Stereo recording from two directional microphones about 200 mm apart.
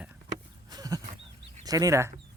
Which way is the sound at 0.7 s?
20° right (ahead or behind).